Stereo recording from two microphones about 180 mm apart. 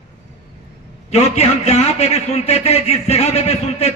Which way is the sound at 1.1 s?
35° left (ahead or behind).